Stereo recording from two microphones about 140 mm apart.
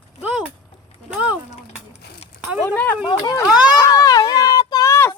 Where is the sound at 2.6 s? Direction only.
15° left (ahead or behind).